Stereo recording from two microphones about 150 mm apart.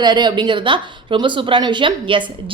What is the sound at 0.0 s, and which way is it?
Speech, 30° right (ahead or behind).